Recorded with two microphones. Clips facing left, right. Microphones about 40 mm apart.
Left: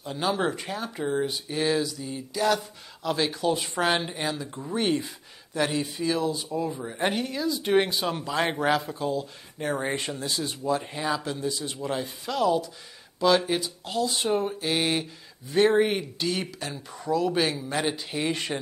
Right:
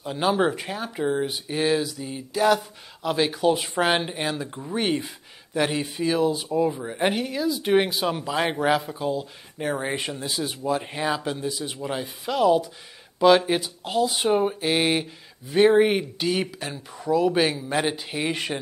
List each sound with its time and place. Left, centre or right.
0.0 s speech: centre
16.9 s speech: centre
17.2 s speech: centre